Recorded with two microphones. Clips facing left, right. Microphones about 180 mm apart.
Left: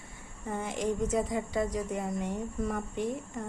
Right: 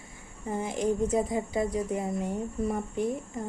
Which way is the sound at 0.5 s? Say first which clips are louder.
Right 3 dB; 35° right (ahead or behind).